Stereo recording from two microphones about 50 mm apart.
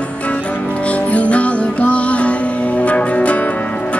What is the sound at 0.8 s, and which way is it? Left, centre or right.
Music, left.